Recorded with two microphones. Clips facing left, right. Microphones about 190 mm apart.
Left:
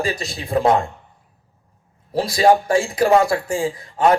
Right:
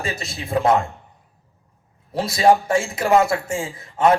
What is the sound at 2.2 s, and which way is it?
Speech, 25° right (ahead or behind).